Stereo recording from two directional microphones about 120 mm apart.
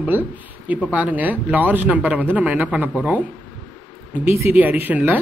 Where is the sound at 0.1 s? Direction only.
15° right (ahead or behind).